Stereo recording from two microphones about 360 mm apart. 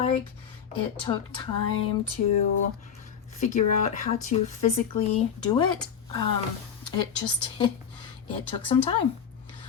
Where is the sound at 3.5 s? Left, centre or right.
Centre.